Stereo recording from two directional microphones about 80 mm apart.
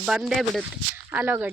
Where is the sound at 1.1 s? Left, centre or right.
Right.